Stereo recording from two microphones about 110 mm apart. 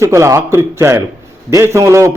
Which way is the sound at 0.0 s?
25° right (ahead or behind).